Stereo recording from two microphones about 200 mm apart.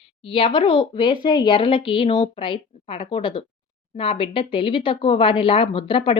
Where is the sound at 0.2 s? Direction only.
25° left (ahead or behind).